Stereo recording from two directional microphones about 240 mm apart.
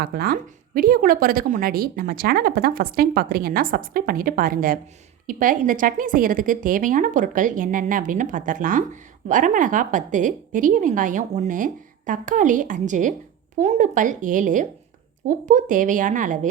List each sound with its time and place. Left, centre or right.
0.0 s speech: right